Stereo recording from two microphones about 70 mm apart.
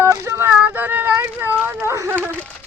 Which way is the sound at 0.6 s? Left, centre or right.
Right.